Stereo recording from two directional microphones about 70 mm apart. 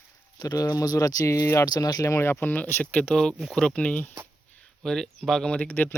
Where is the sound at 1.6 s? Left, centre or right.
Left.